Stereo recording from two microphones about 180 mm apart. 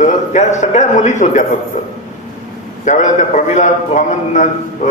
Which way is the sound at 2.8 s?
45° left (ahead or behind).